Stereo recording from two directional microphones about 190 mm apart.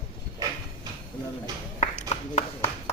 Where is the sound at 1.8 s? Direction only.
35° left (ahead or behind).